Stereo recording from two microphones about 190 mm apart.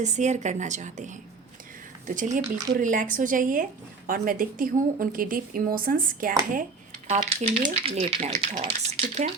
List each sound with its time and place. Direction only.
0.0 s a woman's voice: 40° right (ahead or behind)